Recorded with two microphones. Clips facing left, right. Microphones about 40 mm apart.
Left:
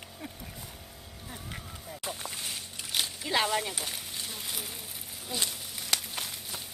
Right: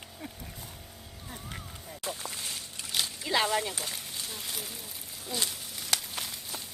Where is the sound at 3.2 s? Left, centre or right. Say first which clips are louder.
Right 1 dB; centre.